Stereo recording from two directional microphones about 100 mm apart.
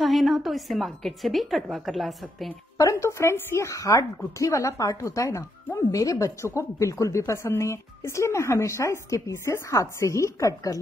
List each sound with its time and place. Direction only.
0.0 s a woman's voice: centre (ahead or behind)
2.8 s a woman's voice: 30° left (ahead or behind)